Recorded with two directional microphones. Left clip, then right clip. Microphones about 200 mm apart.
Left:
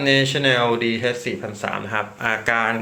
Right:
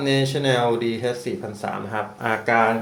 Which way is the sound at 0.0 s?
5° right (ahead or behind).